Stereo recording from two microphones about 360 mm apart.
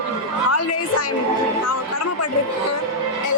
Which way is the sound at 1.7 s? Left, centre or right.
Left.